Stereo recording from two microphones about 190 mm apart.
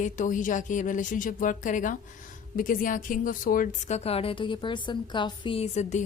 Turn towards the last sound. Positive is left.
turn(degrees=35)  # may be behind; listen again after turning